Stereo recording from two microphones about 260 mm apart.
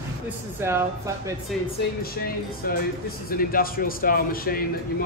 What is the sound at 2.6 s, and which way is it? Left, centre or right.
A man's voice, left.